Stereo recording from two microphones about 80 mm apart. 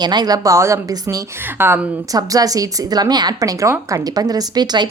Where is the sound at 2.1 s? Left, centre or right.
Right.